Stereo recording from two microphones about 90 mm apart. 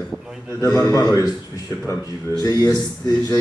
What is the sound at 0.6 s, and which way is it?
A man's voice, 40° left (ahead or behind).